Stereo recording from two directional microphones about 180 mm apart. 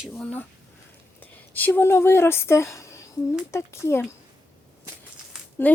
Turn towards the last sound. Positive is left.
turn(degrees=10)  # may be behind; listen again after turning